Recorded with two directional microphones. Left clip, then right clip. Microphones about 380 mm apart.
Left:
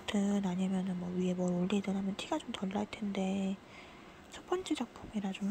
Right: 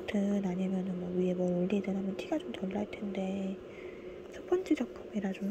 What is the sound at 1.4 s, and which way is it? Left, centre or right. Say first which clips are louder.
A woman's voice: right 3 dB; centre.